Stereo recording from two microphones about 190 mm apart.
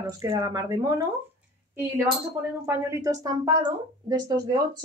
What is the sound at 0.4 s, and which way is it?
Speech, 15° right (ahead or behind).